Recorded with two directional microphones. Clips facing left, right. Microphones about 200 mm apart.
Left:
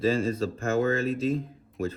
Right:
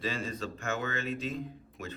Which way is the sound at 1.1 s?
Centre (ahead or behind).